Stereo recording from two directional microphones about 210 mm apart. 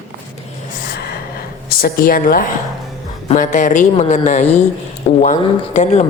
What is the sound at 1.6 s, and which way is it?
A woman's voice, 45° left (ahead or behind).